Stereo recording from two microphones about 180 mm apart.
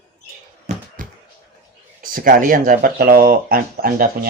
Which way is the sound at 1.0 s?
50° right (ahead or behind).